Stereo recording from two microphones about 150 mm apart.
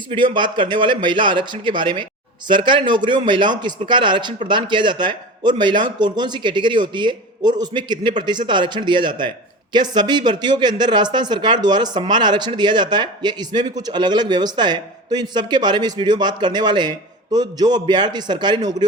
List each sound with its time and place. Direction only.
0.3 s speech: 35° right (ahead or behind)